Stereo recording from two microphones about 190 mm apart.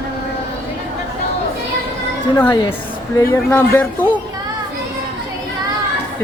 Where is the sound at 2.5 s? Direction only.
25° left (ahead or behind).